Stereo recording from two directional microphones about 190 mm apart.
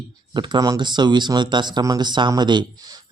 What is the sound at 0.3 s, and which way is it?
Speech, 25° right (ahead or behind).